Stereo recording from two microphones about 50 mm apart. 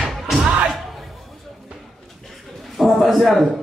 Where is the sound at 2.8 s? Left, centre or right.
Centre.